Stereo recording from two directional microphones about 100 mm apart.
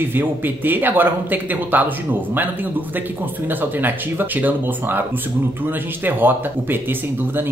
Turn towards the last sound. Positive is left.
turn(degrees=-20)  # may be behind; listen again after turning